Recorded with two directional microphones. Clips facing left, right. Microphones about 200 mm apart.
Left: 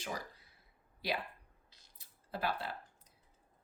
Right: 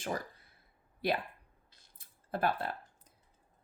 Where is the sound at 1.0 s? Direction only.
55° right (ahead or behind).